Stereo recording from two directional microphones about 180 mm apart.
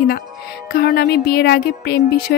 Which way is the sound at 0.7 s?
60° left (ahead or behind).